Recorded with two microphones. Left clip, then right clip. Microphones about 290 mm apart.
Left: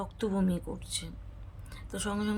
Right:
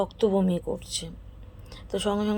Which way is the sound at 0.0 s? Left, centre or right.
Left.